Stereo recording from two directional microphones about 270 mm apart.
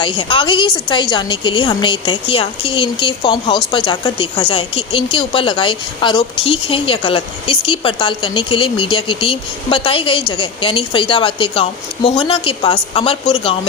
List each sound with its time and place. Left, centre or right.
0.0 s a woman's voice: centre